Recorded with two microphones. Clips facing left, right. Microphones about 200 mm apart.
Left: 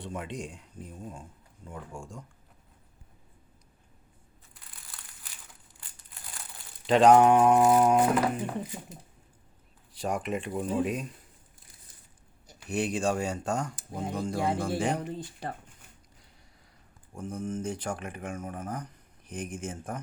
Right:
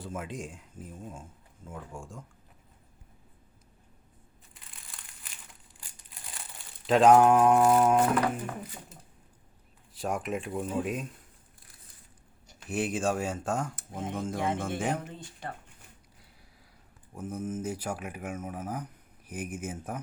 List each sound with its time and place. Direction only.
0.0 s speech: centre (ahead or behind)
5.8 s crumpling: 5° right (ahead or behind)
9.9 s speech: centre (ahead or behind)
12.5 s speech: centre (ahead or behind)
15.0 s speech: 35° left (ahead or behind)
17.2 s speech: 5° right (ahead or behind)